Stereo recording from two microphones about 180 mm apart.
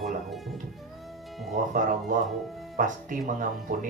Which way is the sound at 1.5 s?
50° right (ahead or behind).